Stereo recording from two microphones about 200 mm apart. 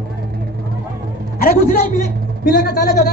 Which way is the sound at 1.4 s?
45° left (ahead or behind).